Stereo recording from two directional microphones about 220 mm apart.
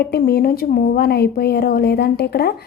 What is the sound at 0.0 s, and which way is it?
Speech, 45° left (ahead or behind).